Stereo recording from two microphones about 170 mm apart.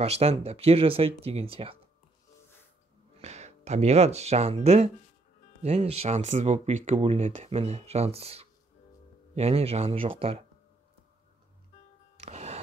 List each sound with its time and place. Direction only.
0.0 s speech: 35° right (ahead or behind)
3.2 s speech: 40° right (ahead or behind)
12.2 s music: 40° right (ahead or behind)